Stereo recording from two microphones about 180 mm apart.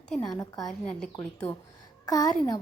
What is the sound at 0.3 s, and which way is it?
Speech, 20° left (ahead or behind).